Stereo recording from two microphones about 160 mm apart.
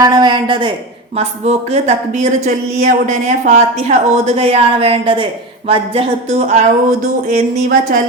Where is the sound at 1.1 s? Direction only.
40° right (ahead or behind).